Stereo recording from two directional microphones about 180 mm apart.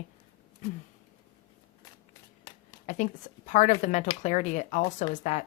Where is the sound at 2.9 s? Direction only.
45° left (ahead or behind).